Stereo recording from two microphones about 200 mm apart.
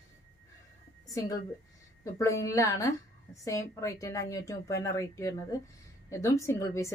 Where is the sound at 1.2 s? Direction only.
15° left (ahead or behind).